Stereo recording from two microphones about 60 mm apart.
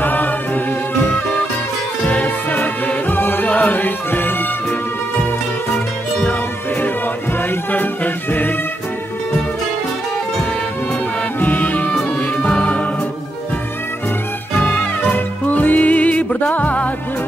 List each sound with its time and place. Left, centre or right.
0.0 s music: left
2.0 s music: left
7.3 s music: left
11.3 s music: left
14.6 s music: left